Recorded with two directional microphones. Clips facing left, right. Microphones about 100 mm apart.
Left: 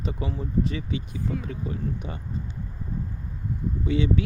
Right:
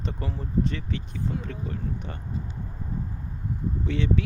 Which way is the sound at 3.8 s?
5° left (ahead or behind).